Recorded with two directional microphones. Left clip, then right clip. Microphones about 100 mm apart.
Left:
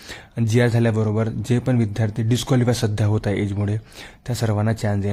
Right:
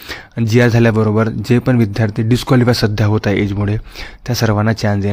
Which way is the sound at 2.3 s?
20° right (ahead or behind).